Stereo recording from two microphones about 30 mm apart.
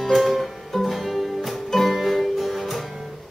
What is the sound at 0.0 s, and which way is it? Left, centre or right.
Music, centre.